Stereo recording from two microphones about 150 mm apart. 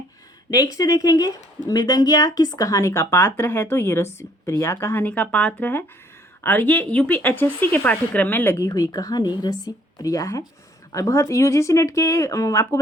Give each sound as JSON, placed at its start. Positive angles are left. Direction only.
{"t": 0.5, "sound": "speech", "side_deg": 25}